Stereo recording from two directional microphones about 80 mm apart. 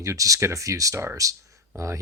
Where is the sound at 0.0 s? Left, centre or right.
Right.